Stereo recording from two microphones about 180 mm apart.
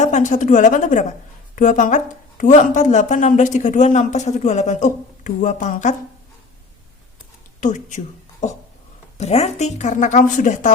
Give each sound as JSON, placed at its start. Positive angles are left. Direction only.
{"t": 0.0, "sound": "speech", "side_deg": 40}
{"t": 7.6, "sound": "speech", "side_deg": 45}